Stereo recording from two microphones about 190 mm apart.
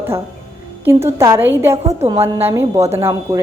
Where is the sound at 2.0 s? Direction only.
30° right (ahead or behind).